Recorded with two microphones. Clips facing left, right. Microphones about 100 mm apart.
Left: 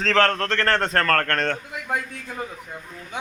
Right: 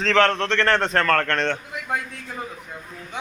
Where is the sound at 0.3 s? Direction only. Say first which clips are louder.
Right 2 dB; 25° right (ahead or behind).